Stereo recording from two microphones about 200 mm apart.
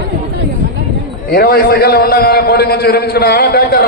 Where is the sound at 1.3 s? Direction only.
50° left (ahead or behind).